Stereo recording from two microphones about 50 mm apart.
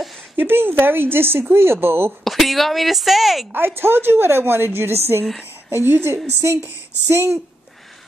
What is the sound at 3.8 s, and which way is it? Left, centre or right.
A woman's voice, right.